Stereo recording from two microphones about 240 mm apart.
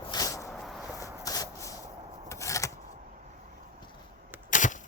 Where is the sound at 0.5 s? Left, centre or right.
Centre.